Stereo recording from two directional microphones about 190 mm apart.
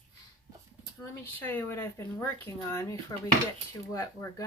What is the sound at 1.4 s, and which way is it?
Speech, 10° left (ahead or behind).